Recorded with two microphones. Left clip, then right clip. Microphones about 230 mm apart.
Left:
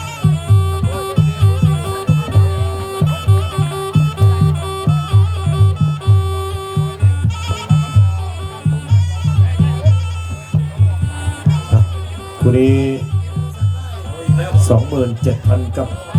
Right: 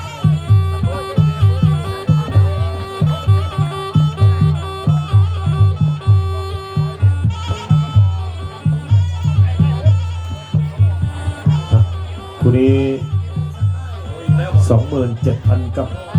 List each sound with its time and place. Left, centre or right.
0.2 s music: left
9.2 s music: left
10.5 s music: left
14.3 s speech: left